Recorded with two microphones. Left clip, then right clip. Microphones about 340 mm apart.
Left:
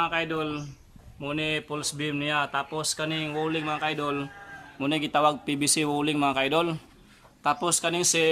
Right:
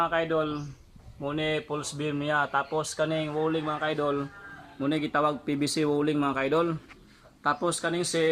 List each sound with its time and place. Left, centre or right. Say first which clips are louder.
0.0 s speech: right 1 dB; centre
4.8 s speech: left 3 dB; centre